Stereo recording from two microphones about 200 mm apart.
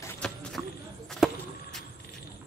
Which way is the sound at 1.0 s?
Centre (ahead or behind).